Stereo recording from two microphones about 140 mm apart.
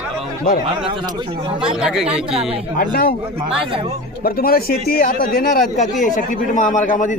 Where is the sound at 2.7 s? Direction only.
90° left.